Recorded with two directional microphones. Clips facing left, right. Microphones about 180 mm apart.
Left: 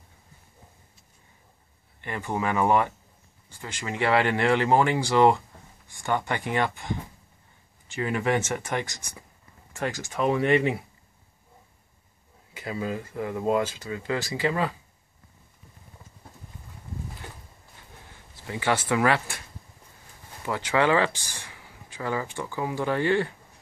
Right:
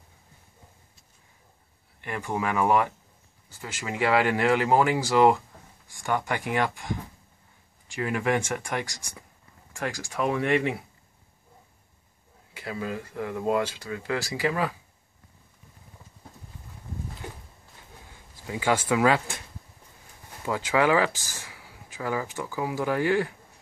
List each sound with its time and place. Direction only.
2.0 s speech: centre (ahead or behind)
9.7 s a sound: centre (ahead or behind)
10.1 s speech: centre (ahead or behind)
12.5 s speech: centre (ahead or behind)
18.3 s speech: 10° right (ahead or behind)
20.4 s speech: 10° right (ahead or behind)
21.1 s speech: 90° right
21.5 s speech: 10° right (ahead or behind)